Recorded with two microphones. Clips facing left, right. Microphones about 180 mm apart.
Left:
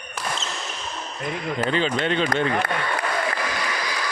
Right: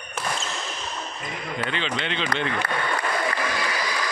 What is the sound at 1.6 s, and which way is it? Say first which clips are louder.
Speech: left 6 dB; 45° left (ahead or behind).